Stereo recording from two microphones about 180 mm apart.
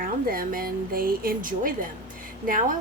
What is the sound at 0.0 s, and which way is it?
Speech, 55° right (ahead or behind).